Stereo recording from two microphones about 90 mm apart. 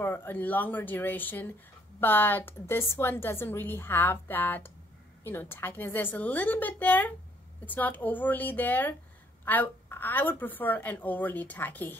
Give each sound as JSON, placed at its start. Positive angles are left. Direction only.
{"t": 0.0, "sound": "a woman's voice", "side_deg": 25}